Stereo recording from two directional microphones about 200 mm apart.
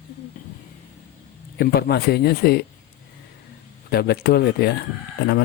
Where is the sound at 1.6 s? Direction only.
50° left (ahead or behind).